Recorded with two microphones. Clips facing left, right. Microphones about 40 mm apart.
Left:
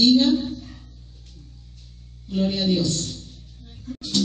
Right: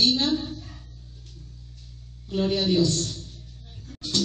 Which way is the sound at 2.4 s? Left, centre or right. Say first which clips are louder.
Even; left.